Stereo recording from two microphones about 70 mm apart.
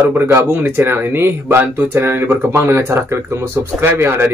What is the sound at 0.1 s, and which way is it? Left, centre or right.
Speech, right.